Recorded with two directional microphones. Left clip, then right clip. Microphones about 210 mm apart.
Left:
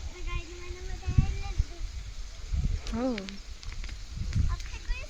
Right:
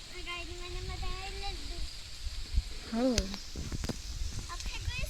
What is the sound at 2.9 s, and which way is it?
Speech, centre (ahead or behind).